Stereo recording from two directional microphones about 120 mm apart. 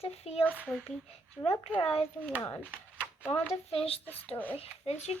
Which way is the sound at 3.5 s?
55° left (ahead or behind).